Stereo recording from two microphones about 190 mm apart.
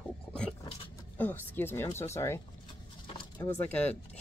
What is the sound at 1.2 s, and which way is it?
Speech, 10° left (ahead or behind).